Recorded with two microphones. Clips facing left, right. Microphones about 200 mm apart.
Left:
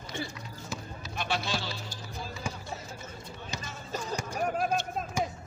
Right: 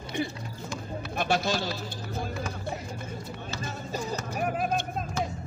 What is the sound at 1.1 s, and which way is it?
Speech, 50° right (ahead or behind).